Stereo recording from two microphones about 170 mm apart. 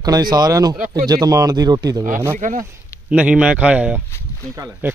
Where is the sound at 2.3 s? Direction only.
50° right (ahead or behind).